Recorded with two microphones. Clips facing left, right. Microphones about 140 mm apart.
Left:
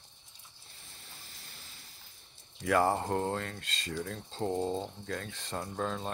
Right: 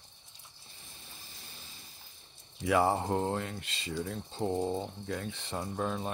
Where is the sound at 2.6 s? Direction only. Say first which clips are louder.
Even; 10° right (ahead or behind).